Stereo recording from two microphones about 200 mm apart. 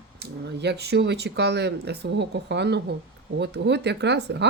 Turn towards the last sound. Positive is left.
turn(degrees=-60)  # may be behind; listen again after turning